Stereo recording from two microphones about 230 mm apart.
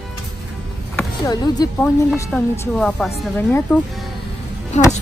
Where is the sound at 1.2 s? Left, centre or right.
Centre.